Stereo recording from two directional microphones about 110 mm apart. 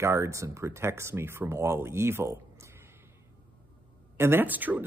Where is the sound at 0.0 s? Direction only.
25° right (ahead or behind).